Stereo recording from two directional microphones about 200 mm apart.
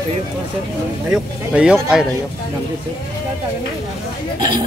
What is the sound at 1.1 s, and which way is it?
Speech, 5° right (ahead or behind).